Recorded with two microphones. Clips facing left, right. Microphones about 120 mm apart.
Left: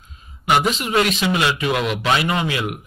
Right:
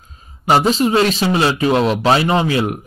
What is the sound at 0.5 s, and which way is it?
A man's voice, 30° right (ahead or behind).